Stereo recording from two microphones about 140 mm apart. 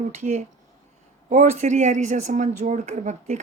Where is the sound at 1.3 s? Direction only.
55° right (ahead or behind).